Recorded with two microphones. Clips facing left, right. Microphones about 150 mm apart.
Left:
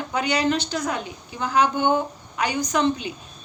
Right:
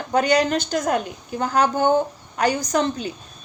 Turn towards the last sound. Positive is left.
turn(degrees=-40)  # may be behind; listen again after turning